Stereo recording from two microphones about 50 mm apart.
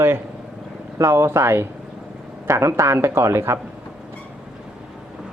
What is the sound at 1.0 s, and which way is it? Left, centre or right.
Speech, right.